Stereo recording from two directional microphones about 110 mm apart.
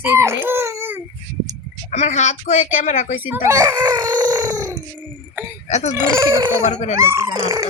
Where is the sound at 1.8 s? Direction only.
90° left.